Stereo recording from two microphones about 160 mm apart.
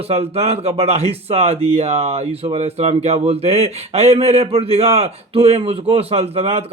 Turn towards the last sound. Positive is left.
turn(degrees=-40)  # may be behind; listen again after turning